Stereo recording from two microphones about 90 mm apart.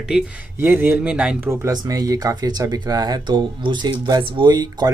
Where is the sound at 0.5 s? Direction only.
25° right (ahead or behind).